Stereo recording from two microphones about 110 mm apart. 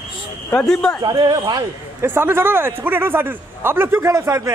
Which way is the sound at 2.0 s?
20° right (ahead or behind).